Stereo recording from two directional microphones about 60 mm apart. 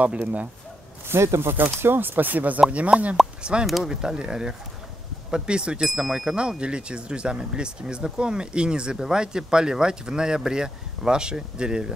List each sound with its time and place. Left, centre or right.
0.0 s speech: right
1.0 s speech: right
3.6 s speech: centre